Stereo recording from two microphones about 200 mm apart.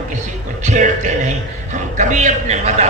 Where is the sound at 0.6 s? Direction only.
40° right (ahead or behind).